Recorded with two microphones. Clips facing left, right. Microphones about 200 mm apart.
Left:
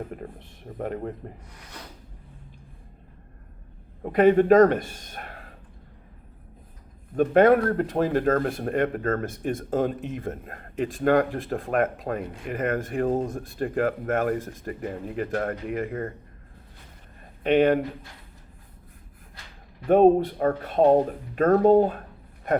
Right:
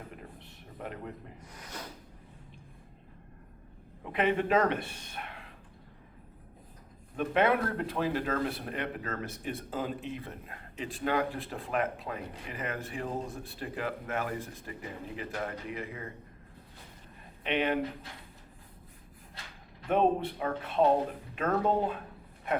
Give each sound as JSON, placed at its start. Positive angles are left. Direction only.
{"t": 0.2, "sound": "speech", "side_deg": 45}
{"t": 4.0, "sound": "a man's voice", "side_deg": 45}
{"t": 7.2, "sound": "speech", "side_deg": 45}
{"t": 17.4, "sound": "speech", "side_deg": 45}
{"t": 19.9, "sound": "speech", "side_deg": 45}